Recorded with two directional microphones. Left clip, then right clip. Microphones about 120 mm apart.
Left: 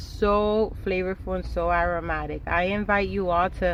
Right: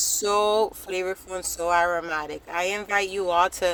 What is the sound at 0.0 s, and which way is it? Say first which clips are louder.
Speech: even; 40° right (ahead or behind).